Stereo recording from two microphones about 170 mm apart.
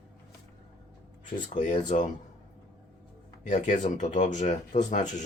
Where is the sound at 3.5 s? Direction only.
45° left (ahead or behind).